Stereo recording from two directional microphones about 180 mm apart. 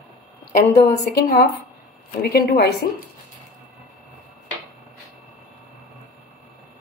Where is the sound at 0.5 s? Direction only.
65° left (ahead or behind).